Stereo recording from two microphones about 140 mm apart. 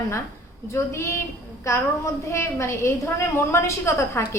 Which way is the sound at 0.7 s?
20° left (ahead or behind).